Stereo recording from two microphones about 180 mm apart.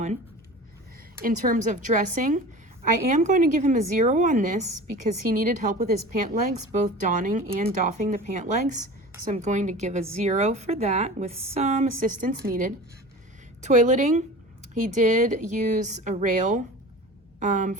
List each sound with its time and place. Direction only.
1.2 s a woman's voice: 45° right (ahead or behind)